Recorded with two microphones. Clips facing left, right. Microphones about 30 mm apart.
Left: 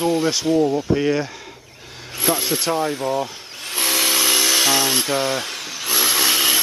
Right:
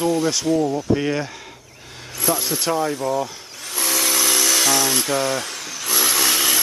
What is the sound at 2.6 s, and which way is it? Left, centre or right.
Speech, centre.